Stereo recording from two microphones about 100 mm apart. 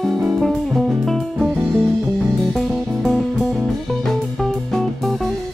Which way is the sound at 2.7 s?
Centre (ahead or behind).